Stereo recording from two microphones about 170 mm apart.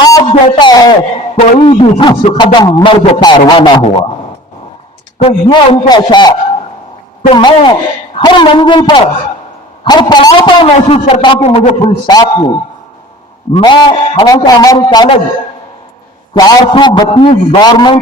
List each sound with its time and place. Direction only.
0.1 s a man's voice: 30° left (ahead or behind)
5.2 s a man's voice: 35° left (ahead or behind)
7.3 s a man's voice: 25° left (ahead or behind)
11.4 s a man's voice: 40° left (ahead or behind)
11.9 s a man's voice: 25° left (ahead or behind)
13.5 s a man's voice: 25° left (ahead or behind)
16.3 s a man's voice: 25° left (ahead or behind)